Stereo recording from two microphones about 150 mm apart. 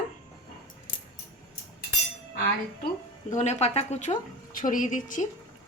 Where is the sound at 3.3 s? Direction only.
50° left (ahead or behind).